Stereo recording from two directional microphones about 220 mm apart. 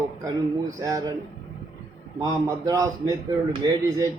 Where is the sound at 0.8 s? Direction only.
15° right (ahead or behind).